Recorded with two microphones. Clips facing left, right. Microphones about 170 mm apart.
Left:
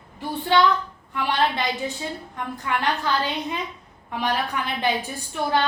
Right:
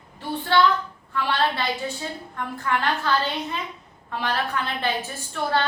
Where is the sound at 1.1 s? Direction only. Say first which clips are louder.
Left 1 dB; 15° left (ahead or behind).